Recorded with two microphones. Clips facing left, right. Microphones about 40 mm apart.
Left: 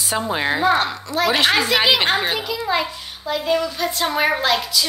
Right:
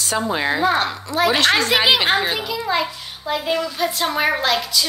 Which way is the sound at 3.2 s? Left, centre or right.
Centre.